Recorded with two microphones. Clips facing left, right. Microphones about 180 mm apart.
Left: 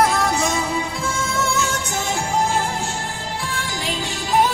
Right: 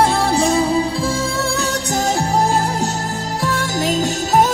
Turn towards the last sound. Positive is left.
turn(degrees=-45)  # may be behind; listen again after turning